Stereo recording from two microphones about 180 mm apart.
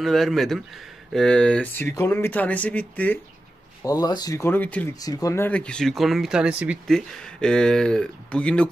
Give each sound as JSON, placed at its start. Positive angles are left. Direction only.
{"t": 0.0, "sound": "speech", "side_deg": 0}
{"t": 3.8, "sound": "speech", "side_deg": 20}
{"t": 4.9, "sound": "speech", "side_deg": 20}